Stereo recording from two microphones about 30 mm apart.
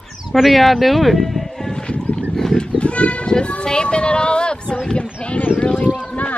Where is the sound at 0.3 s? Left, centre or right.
Centre.